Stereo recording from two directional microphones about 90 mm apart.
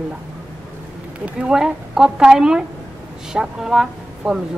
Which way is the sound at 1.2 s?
10° right (ahead or behind).